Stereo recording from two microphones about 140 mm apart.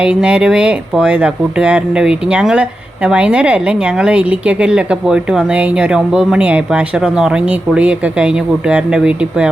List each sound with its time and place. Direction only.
0.0 s speech: 5° right (ahead or behind)